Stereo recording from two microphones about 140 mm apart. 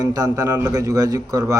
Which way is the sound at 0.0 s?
25° right (ahead or behind).